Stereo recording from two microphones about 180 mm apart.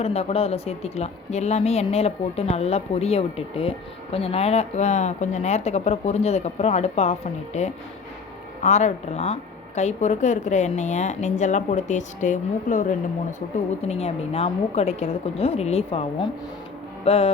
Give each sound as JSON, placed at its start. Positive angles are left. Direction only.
{"t": 0.0, "sound": "speech", "side_deg": 35}
{"t": 17.0, "sound": "music", "side_deg": 35}